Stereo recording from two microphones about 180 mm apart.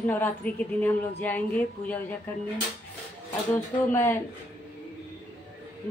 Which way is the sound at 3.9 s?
15° left (ahead or behind).